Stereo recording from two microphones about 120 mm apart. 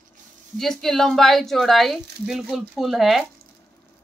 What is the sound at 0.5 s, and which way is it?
A woman's voice, 5° left (ahead or behind).